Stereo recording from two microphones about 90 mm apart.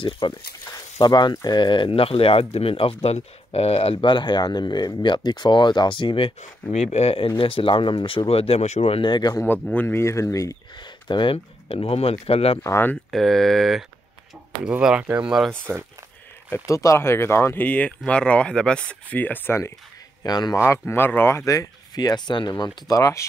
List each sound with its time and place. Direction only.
0.2 s speech: 60° left (ahead or behind)
9.3 s speech: 25° left (ahead or behind)
10.8 s speech: 60° left (ahead or behind); by 12.5 s 90° left
12.6 s speech: 25° left (ahead or behind)
12.9 s speech: 5° left (ahead or behind)
14.6 s speech: 10° right (ahead or behind)
16.6 s speech: 35° left (ahead or behind)
20.2 s speech: 50° left (ahead or behind)
20.5 s speech: 25° left (ahead or behind)
21.5 s speech: 40° left (ahead or behind)
22.9 s speech: 40° left (ahead or behind)